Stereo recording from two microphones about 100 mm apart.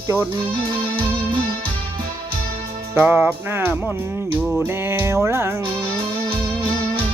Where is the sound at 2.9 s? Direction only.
20° right (ahead or behind).